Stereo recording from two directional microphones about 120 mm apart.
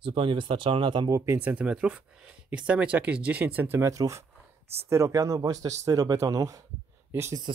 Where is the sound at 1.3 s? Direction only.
15° right (ahead or behind).